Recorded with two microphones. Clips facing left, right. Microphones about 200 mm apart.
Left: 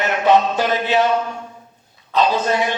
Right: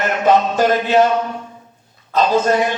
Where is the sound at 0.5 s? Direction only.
45° right (ahead or behind).